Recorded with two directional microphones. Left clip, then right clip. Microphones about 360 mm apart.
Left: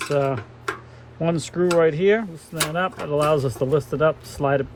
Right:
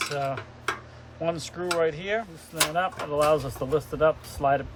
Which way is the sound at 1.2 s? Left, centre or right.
Left.